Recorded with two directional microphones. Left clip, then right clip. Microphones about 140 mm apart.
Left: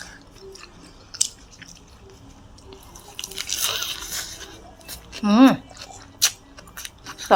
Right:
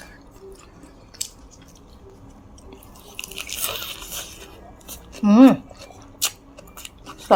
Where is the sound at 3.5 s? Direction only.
25° right (ahead or behind).